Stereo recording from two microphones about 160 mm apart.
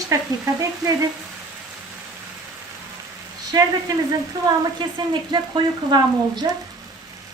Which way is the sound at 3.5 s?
20° right (ahead or behind).